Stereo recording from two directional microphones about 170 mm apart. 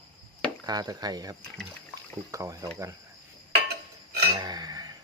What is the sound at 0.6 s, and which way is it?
Speech, 25° right (ahead or behind).